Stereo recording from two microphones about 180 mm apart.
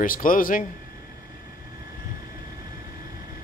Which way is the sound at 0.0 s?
50° left (ahead or behind).